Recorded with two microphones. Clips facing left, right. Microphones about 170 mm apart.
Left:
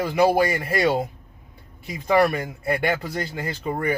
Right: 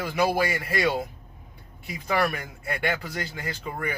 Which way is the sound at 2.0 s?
30° left (ahead or behind).